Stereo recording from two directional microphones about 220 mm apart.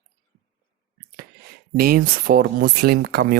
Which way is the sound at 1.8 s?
40° right (ahead or behind).